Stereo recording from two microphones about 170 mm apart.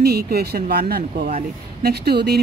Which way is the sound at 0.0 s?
65° right (ahead or behind).